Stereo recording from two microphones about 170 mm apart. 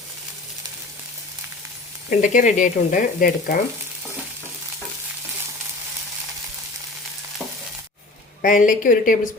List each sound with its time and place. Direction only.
2.0 s speech: 50° left (ahead or behind)
8.4 s a woman's voice: 50° left (ahead or behind)